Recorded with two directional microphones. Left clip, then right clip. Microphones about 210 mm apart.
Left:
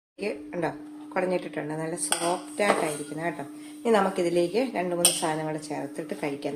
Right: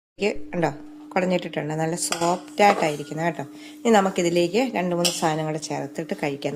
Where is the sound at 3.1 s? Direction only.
45° right (ahead or behind).